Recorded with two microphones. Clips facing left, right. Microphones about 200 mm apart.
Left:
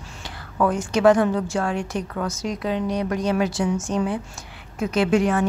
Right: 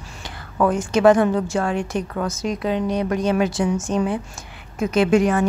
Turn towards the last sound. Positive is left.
turn(degrees=-15)  # may be behind; listen again after turning